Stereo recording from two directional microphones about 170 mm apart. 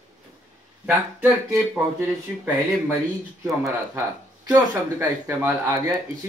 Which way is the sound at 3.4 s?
15° right (ahead or behind).